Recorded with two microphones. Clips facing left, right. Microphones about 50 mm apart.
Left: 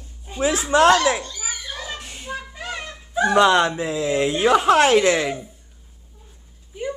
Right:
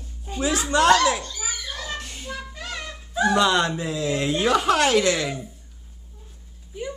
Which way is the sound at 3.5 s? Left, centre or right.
Centre.